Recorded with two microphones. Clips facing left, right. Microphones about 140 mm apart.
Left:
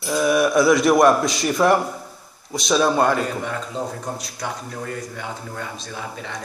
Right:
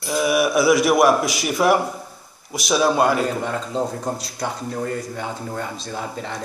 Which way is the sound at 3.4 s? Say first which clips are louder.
Right 3 dB; 30° right (ahead or behind).